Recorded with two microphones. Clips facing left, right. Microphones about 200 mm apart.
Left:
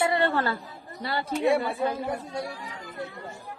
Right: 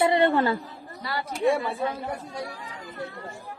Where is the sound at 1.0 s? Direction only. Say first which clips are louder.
Even; 30° left (ahead or behind).